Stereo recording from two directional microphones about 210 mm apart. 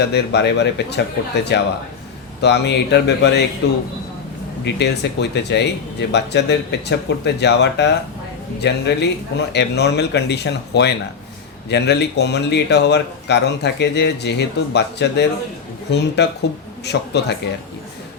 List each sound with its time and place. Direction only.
0.0 s speech: 55° left (ahead or behind)